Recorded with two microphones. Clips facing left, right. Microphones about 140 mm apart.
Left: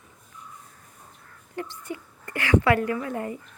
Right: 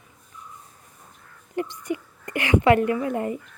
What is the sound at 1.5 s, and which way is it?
A woman's voice, 20° right (ahead or behind).